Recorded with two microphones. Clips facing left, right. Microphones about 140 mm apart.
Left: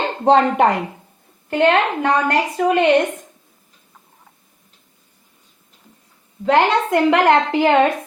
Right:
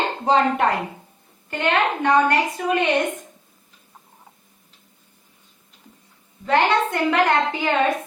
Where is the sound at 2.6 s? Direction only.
60° left (ahead or behind).